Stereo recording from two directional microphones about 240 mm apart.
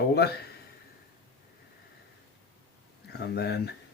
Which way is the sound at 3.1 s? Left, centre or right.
Left.